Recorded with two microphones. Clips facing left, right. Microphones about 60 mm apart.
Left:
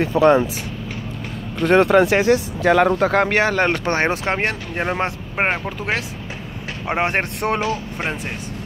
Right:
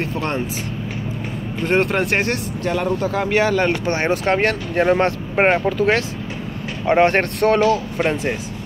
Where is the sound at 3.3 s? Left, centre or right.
Left.